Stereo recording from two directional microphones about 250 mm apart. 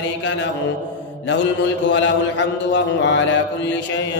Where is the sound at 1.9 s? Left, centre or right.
Left.